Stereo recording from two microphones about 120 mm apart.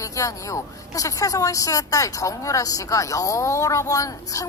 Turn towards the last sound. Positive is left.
turn(degrees=30)  # may be behind; listen again after turning